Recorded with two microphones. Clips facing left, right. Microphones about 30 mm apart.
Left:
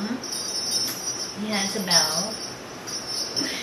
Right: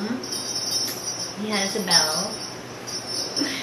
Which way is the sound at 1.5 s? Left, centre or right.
Centre.